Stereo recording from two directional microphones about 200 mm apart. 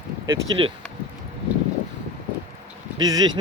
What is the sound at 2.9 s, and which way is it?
Speech, 20° right (ahead or behind).